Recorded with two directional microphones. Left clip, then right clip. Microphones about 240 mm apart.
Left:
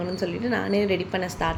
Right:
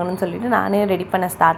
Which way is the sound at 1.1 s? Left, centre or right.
Right.